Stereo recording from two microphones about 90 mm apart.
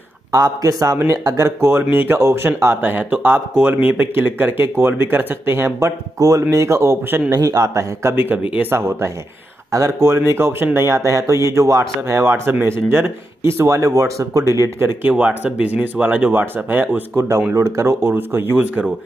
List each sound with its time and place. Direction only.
0.3 s speech: 40° right (ahead or behind)
12.3 s speech: 25° right (ahead or behind)
15.0 s speech: 15° right (ahead or behind)